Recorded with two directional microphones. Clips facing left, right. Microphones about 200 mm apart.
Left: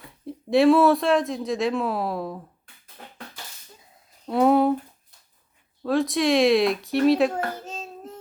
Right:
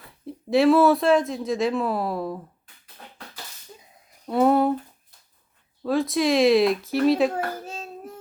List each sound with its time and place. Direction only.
0.0 s speech: centre (ahead or behind)
4.3 s a sound: centre (ahead or behind)
5.8 s speech: centre (ahead or behind)